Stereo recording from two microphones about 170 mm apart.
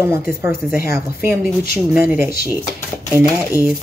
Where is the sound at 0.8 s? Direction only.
15° right (ahead or behind).